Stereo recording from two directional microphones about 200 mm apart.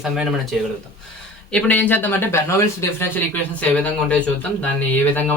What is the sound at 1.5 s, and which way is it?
A man's voice, 5° left (ahead or behind).